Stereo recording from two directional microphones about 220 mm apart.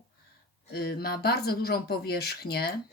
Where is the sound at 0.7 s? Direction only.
45° left (ahead or behind).